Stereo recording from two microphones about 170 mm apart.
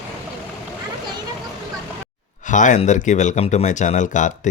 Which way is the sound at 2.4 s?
50° left (ahead or behind).